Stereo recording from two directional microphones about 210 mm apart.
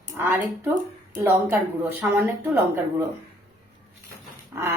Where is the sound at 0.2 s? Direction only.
10° right (ahead or behind).